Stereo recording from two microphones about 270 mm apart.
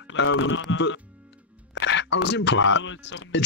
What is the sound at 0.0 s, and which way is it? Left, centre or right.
Speech, left.